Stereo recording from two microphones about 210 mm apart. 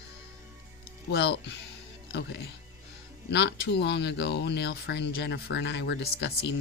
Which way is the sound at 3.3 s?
55° left (ahead or behind).